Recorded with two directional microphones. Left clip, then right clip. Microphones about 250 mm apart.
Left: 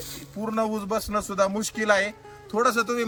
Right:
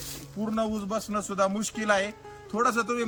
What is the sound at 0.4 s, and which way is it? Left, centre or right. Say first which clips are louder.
A man's voice: left 4 dB; centre.